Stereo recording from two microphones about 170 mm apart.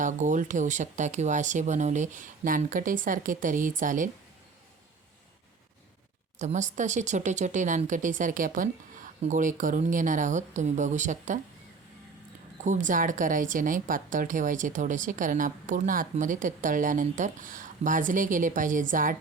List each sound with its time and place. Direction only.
0.0 s a woman's voice: 45° right (ahead or behind)
6.4 s a woman's voice: 45° right (ahead or behind)
12.6 s a woman's voice: 45° right (ahead or behind)